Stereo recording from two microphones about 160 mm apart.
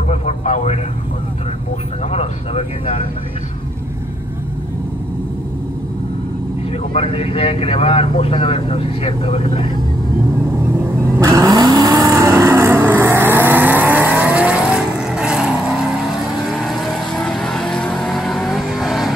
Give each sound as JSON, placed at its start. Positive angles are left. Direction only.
{"t": 0.1, "sound": "vehicle", "side_deg": 45}
{"t": 2.1, "sound": "vehicle", "side_deg": 40}
{"t": 6.9, "sound": "speech", "side_deg": 35}
{"t": 10.7, "sound": "vehicle", "side_deg": -15}